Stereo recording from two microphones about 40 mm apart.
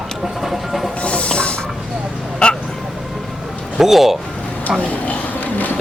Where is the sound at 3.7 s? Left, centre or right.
Centre.